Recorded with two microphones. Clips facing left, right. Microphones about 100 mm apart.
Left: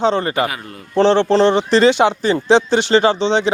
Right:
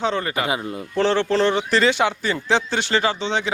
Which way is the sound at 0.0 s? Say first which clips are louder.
Left 6 dB; 30° left (ahead or behind).